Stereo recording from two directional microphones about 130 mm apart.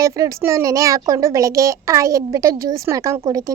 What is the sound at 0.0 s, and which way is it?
A child's voice, 25° right (ahead or behind).